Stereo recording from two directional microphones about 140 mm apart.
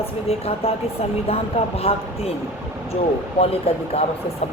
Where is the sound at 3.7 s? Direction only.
45° left (ahead or behind).